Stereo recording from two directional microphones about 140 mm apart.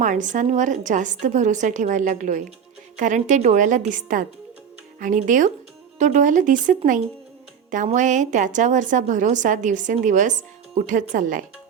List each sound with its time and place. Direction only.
0.0 s a woman's voice: 65° right (ahead or behind)
7.9 s a woman's voice: 60° right (ahead or behind)